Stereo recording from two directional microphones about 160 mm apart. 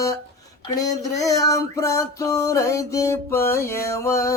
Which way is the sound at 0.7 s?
20° left (ahead or behind).